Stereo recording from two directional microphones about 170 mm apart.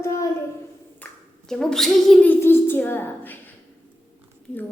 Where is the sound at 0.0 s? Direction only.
15° left (ahead or behind).